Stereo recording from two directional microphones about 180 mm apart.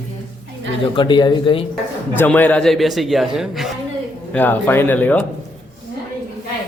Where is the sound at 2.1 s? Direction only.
10° left (ahead or behind).